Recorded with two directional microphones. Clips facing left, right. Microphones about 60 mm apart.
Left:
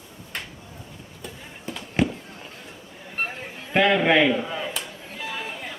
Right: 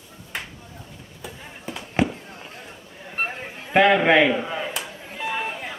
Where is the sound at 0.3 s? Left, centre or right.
Centre.